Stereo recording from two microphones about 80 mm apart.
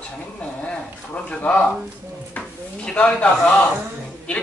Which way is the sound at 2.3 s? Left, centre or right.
Centre.